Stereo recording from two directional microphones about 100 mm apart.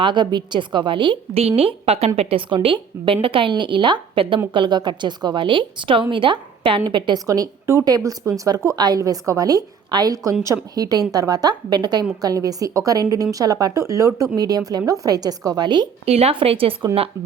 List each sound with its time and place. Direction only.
0.0 s a woman's voice: 50° right (ahead or behind)
1.4 s a woman's voice: 80° right
2.5 s a woman's voice: 60° right (ahead or behind)
7.3 s speech: 35° right (ahead or behind)
16.0 s speech: 85° right; by 17.1 s 70° right (ahead or behind)